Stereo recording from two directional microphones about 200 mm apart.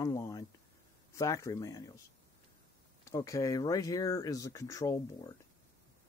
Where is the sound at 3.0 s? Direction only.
15° left (ahead or behind).